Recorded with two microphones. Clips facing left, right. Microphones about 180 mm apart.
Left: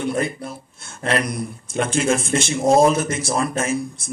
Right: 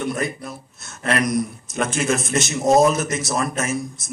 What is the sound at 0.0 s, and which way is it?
Speech, 30° left (ahead or behind).